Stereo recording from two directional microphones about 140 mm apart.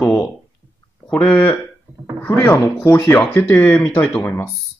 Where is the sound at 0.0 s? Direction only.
10° left (ahead or behind).